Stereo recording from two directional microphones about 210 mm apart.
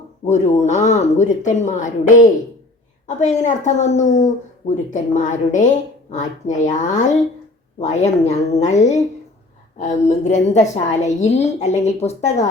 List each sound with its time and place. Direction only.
0.3 s a woman's voice: 35° left (ahead or behind)